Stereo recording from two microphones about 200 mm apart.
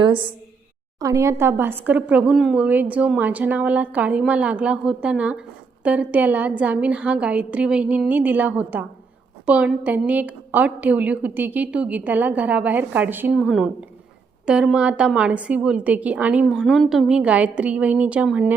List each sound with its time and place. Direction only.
0.0 s a woman's voice: 25° right (ahead or behind); by 18.5 s 5° right (ahead or behind)